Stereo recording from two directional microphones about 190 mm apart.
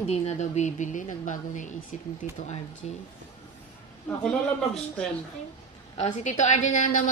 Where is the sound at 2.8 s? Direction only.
35° left (ahead or behind).